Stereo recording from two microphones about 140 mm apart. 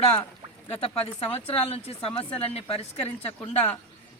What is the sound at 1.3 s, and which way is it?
A man's voice, 40° left (ahead or behind).